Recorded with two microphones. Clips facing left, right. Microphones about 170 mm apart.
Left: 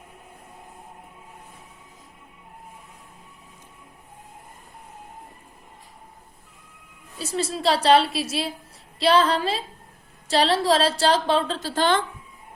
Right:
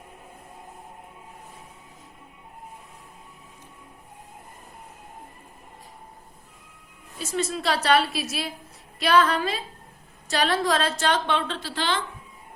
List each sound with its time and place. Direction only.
7.2 s a woman's voice: 35° left (ahead or behind)